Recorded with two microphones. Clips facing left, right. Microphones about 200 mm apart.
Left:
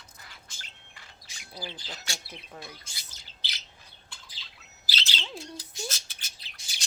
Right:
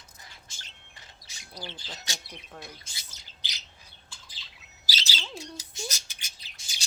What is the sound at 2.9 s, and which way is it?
Squawk, 15° right (ahead or behind).